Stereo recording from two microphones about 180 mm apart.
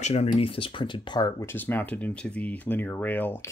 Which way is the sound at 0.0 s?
35° left (ahead or behind).